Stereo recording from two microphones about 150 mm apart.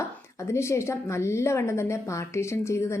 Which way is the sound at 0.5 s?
20° left (ahead or behind).